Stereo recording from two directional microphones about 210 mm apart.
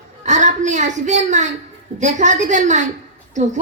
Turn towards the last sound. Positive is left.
turn(degrees=-35)  # may be behind; listen again after turning